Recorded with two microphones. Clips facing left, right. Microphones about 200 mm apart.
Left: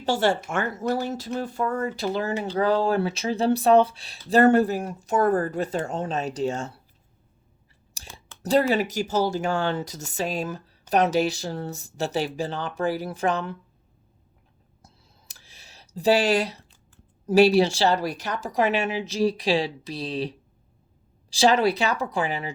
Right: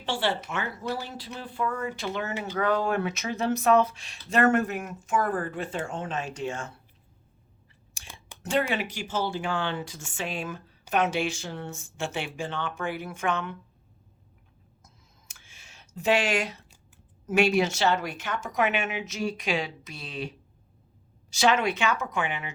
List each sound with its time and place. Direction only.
0.0 s speech: 40° left (ahead or behind)
7.9 s whispering: 35° left (ahead or behind)
8.4 s speech: 35° left (ahead or behind)
14.8 s clicking: 35° left (ahead or behind)
17.2 s speech: 35° left (ahead or behind)